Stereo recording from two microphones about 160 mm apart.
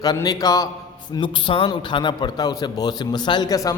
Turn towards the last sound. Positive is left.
turn(degrees=25)  # may be behind; listen again after turning